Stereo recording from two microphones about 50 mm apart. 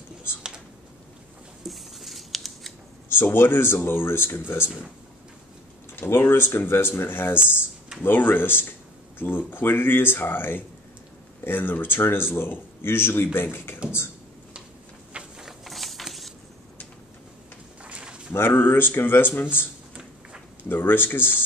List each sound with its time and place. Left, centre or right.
1.6 s scissors: centre
3.1 s speech: left
6.0 s speech: left
15.1 s insect: centre
15.6 s a sound: centre
17.8 s a sound: right
18.3 s speech: left
20.6 s speech: left